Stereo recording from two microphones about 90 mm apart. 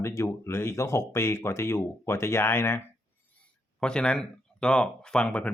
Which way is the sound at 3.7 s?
10° left (ahead or behind).